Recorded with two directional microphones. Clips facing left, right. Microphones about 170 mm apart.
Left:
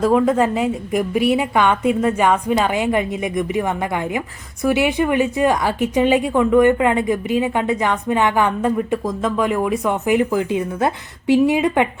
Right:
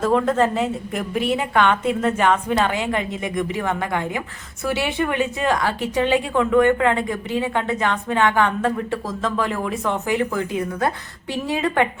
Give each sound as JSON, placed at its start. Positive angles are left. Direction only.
{"t": 0.0, "sound": "a woman's voice", "side_deg": 10}